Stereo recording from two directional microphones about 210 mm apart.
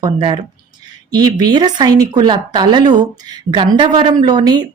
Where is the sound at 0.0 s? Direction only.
25° right (ahead or behind).